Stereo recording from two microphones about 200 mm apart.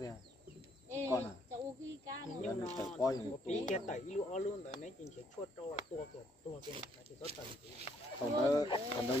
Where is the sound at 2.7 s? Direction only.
10° left (ahead or behind).